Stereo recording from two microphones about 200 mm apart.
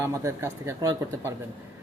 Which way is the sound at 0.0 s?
15° right (ahead or behind).